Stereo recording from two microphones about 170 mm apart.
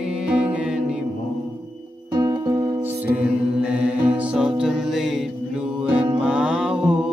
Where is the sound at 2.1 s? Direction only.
25° right (ahead or behind).